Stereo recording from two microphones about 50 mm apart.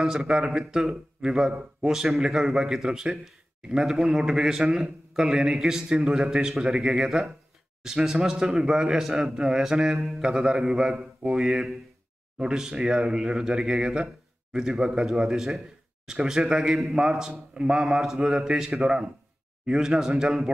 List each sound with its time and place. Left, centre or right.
0.0 s a man's voice: centre
10.2 s a man's voice: centre